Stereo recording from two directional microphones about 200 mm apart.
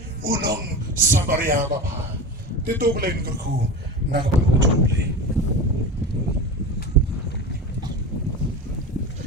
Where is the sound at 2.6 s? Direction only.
50° right (ahead or behind).